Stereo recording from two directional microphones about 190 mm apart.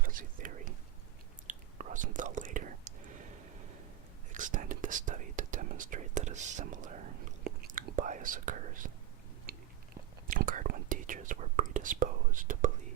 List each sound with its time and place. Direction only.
0.0 s whispering: 45° right (ahead or behind)
4.3 s speech: 45° right (ahead or behind)
7.4 s whispering: 50° right (ahead or behind)
9.5 s biting: 55° right (ahead or behind)
10.2 s speech: 45° right (ahead or behind)